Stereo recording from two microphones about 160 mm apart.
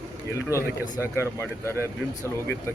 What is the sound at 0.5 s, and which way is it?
Speech, 20° left (ahead or behind).